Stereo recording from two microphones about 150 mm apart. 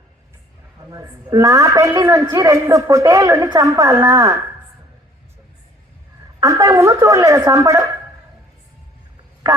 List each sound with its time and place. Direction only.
0.8 s a man's voice: 25° right (ahead or behind)
6.4 s a man's voice: 20° right (ahead or behind)